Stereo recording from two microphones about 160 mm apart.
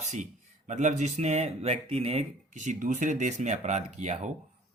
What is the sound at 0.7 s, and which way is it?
Speech, 50° right (ahead or behind).